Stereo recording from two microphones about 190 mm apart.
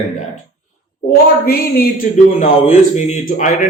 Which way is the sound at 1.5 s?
50° left (ahead or behind).